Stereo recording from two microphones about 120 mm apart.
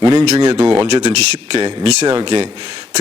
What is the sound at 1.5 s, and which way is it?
Speech, 55° right (ahead or behind).